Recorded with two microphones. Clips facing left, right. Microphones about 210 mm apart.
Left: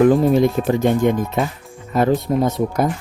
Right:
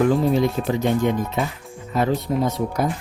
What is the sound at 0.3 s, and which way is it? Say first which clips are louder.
Speech: left 4 dB; 50° left (ahead or behind).